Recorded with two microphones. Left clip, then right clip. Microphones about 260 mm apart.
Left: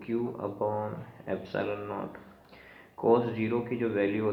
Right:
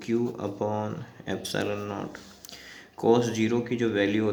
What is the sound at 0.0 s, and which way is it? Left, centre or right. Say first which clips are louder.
Speech: right 4 dB; right.